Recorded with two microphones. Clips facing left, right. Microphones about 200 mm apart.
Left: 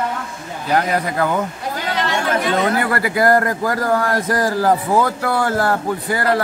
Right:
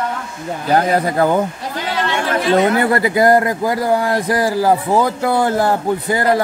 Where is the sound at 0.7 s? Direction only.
30° right (ahead or behind).